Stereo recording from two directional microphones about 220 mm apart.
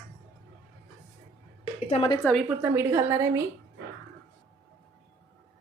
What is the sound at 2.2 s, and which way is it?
A woman's voice, centre (ahead or behind).